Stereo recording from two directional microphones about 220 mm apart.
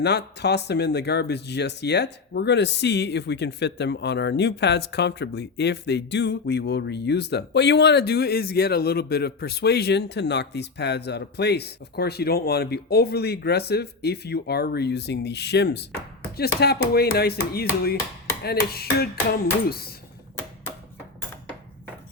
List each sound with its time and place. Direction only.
0.0 s speech: 50° left (ahead or behind)